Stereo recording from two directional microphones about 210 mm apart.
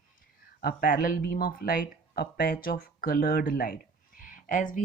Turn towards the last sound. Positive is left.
turn(degrees=40)  # may be behind; listen again after turning